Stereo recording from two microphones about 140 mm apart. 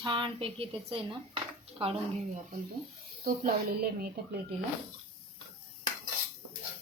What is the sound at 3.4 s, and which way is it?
Speech, 90° right.